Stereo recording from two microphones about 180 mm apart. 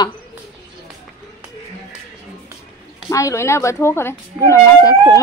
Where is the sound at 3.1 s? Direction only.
15° left (ahead or behind).